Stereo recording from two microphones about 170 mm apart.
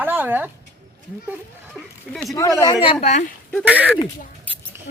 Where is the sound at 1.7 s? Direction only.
Centre (ahead or behind).